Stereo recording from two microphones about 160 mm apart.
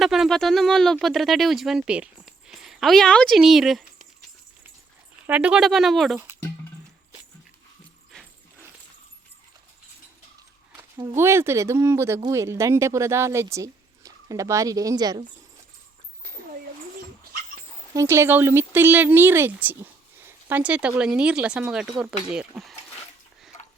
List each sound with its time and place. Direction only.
0.0 s speech: centre (ahead or behind)
5.2 s speech: 10° right (ahead or behind)
8.1 s dog: 5° left (ahead or behind)
10.9 s speech: 20° right (ahead or behind)
17.9 s speech: 15° right (ahead or behind)